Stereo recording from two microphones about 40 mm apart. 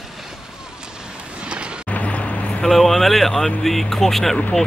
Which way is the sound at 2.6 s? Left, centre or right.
Centre.